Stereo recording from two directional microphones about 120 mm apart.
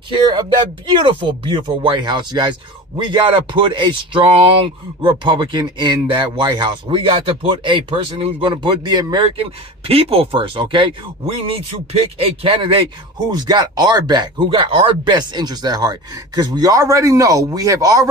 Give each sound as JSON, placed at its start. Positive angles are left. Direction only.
{"t": 0.1, "sound": "speech", "side_deg": -45}
{"t": 9.4, "sound": "speech", "side_deg": -55}
{"t": 13.3, "sound": "speech", "side_deg": -35}